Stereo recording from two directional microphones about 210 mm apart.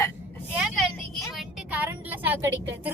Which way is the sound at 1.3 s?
5° right (ahead or behind).